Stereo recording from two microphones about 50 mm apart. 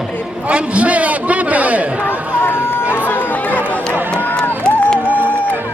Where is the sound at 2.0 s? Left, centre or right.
Left.